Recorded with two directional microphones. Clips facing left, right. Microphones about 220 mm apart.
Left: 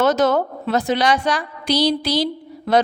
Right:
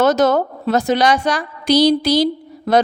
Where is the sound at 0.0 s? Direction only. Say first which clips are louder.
Right 2 dB; 40° right (ahead or behind).